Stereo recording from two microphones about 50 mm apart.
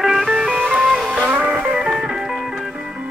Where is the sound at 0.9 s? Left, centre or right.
Centre.